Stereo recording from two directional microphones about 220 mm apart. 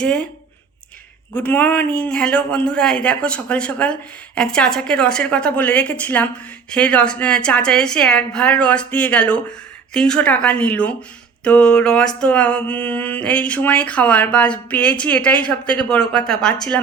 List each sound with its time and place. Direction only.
0.0 s a woman's voice: 5° left (ahead or behind)
1.4 s a woman's voice: 5° left (ahead or behind)